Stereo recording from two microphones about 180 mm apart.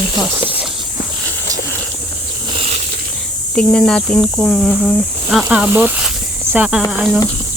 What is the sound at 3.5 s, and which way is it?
Speech, 5° left (ahead or behind).